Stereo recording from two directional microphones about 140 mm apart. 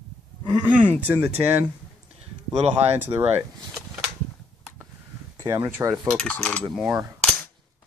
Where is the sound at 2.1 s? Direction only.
45° right (ahead or behind).